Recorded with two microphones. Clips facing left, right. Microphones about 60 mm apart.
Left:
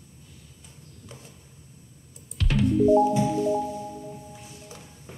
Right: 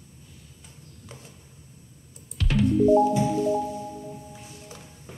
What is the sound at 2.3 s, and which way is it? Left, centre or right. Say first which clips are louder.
Music: right 1 dB; centre.